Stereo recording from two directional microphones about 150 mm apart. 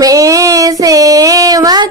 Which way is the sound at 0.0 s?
25° right (ahead or behind).